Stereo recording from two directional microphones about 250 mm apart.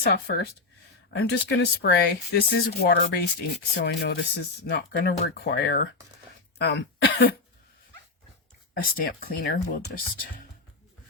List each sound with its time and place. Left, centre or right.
0.0 s speech: left
8.7 s speech: left